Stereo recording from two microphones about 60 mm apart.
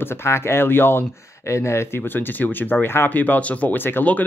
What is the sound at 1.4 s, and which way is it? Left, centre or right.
Speech, left.